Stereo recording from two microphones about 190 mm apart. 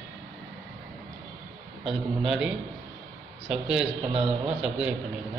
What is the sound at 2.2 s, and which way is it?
Speech, centre (ahead or behind).